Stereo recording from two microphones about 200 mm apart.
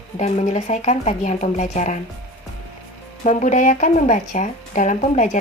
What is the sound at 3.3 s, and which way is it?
Speech, 40° left (ahead or behind).